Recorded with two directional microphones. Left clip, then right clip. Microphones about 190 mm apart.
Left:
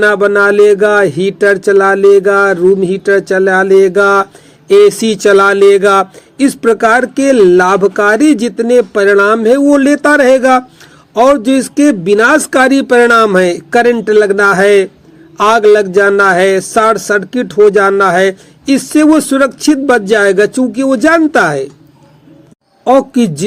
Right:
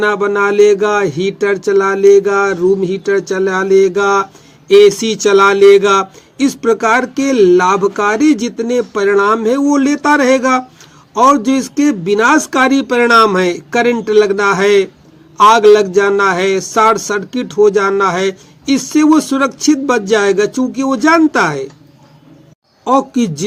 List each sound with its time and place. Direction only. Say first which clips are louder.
0.0 s speech: left 5 dB; 25° left (ahead or behind)
22.8 s speech: left 4 dB; 25° left (ahead or behind)